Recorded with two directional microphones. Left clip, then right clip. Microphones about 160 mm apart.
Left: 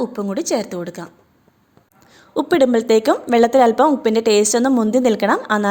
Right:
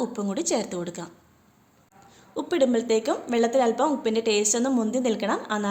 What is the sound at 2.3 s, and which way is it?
A woman's voice, 55° left (ahead or behind).